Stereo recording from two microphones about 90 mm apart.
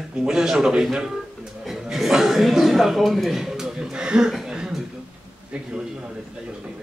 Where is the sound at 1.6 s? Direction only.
5° right (ahead or behind).